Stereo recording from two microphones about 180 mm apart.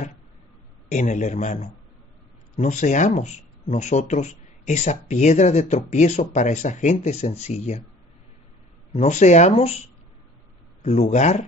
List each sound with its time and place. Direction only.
0.8 s speech: 45° left (ahead or behind)
8.9 s speech: 40° left (ahead or behind)